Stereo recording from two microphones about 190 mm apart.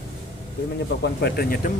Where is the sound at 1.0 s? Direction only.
55° left (ahead or behind).